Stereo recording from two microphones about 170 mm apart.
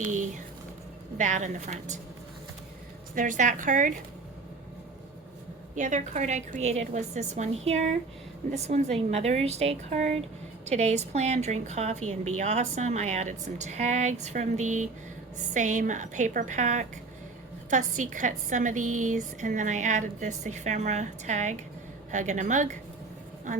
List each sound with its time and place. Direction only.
0.0 s a woman's voice: 50° right (ahead or behind)
3.2 s a woman's voice: 50° right (ahead or behind)
5.7 s a woman's voice: 45° right (ahead or behind)